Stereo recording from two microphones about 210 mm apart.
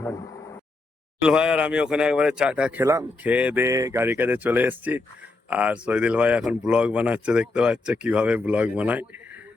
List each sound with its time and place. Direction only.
1.2 s speech: 5° right (ahead or behind)